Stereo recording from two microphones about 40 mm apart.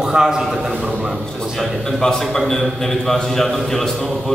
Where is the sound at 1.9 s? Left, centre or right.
Centre.